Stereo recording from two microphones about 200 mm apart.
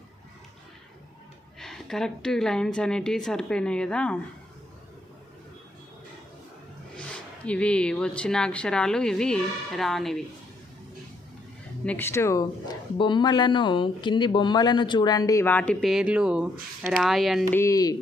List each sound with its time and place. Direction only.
1.5 s speech: centre (ahead or behind)
6.9 s speech: 5° left (ahead or behind)
11.9 s speech: 10° left (ahead or behind)
17.6 s speech: 15° left (ahead or behind)